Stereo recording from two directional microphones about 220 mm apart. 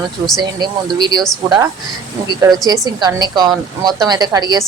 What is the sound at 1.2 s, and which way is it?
Speech, centre (ahead or behind).